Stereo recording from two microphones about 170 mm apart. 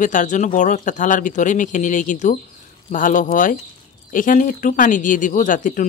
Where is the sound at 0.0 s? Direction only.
50° left (ahead or behind).